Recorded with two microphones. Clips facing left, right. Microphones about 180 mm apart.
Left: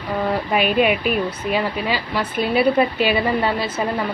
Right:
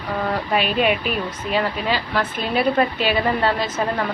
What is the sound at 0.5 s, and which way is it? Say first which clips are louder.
Speech: left 2 dB; 10° left (ahead or behind).